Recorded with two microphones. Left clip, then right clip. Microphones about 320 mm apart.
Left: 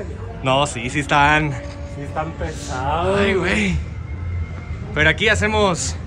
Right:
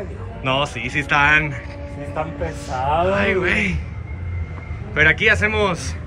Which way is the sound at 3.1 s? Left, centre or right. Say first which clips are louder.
Even; centre.